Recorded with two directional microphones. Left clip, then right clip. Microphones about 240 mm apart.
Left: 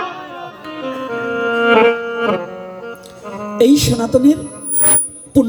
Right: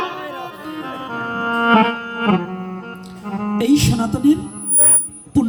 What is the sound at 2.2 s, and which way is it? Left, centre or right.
Music, left.